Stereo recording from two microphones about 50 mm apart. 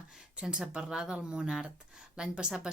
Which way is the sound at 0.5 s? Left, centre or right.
Centre.